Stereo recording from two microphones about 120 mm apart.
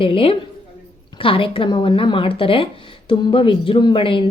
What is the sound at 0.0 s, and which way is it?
A woman's voice, 50° left (ahead or behind).